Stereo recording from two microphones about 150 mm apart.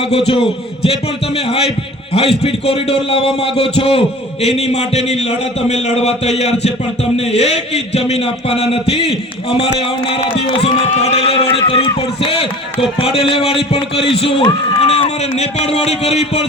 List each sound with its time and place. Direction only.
0.0 s a man's voice: 40° left (ahead or behind)